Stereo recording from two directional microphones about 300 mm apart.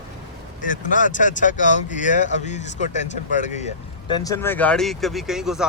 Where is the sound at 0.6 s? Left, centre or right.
Left.